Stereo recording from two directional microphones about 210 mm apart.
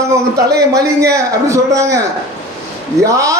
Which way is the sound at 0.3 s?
15° right (ahead or behind).